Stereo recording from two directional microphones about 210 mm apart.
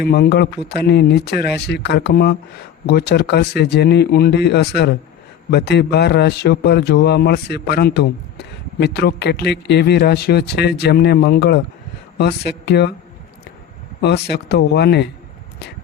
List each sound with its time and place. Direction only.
0.0 s a man's voice: 50° left (ahead or behind)
14.0 s a man's voice: 55° left (ahead or behind)